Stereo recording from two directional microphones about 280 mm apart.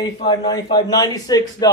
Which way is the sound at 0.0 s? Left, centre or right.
Centre.